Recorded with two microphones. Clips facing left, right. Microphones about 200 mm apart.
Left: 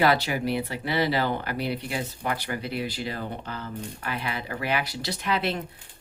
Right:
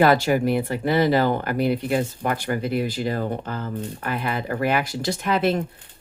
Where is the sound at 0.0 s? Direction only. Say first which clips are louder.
Right 6 dB; 50° right (ahead or behind).